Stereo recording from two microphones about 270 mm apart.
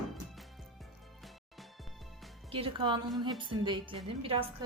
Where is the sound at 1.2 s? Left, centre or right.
Centre.